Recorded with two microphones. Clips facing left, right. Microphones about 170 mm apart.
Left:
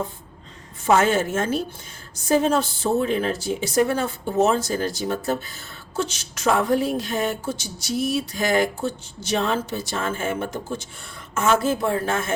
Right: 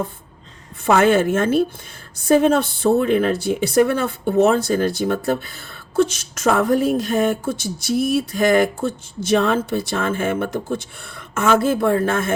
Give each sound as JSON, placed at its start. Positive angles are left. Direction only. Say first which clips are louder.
{"t": 0.9, "sound": "speech", "louder": "right 4 dB", "side_deg": -60}